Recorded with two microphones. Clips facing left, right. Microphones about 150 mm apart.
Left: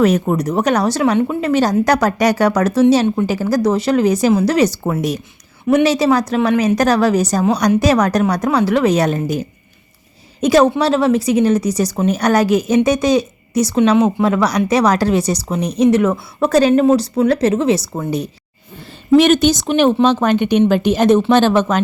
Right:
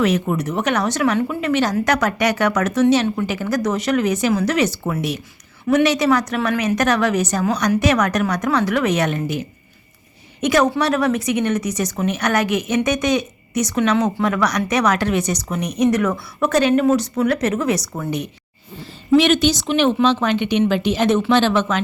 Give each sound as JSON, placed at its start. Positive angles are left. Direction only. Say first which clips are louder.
{"t": 0.0, "sound": "a woman's voice", "louder": "left 4 dB", "side_deg": 40}
{"t": 5.6, "sound": "a woman's voice", "louder": "left 3 dB", "side_deg": 30}
{"t": 19.1, "sound": "a woman's voice", "louder": "left 4 dB", "side_deg": 45}